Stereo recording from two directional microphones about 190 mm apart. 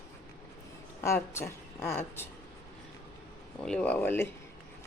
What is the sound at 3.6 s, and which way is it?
Speech, 5° left (ahead or behind).